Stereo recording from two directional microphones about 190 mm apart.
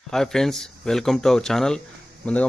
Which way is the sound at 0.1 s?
Centre (ahead or behind).